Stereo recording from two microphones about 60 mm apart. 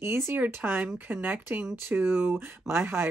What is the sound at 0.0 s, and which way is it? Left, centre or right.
Speech, right.